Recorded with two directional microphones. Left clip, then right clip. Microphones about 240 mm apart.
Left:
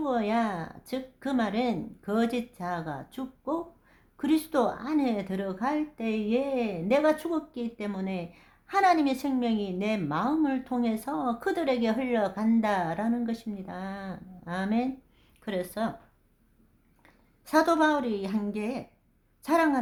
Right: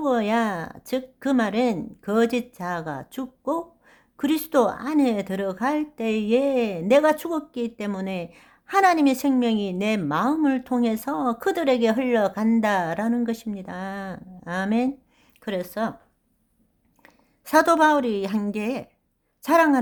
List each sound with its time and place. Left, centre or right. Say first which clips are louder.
0.0 s a woman's voice: right 5 dB; right
17.0 s a woman's voice: right 7 dB; right